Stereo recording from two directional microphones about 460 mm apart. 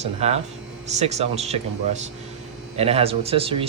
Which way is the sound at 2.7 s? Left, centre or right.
Centre.